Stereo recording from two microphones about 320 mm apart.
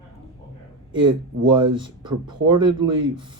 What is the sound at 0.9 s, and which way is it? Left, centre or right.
Speech, centre.